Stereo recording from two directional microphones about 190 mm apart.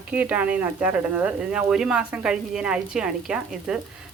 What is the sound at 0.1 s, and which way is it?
Speech, 10° right (ahead or behind).